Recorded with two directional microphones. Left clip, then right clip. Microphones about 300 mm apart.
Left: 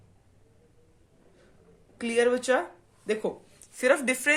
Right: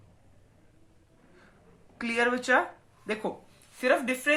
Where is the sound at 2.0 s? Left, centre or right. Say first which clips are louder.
Left 3 dB; left.